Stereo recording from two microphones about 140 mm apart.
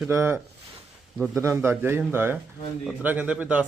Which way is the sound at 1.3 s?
20° right (ahead or behind).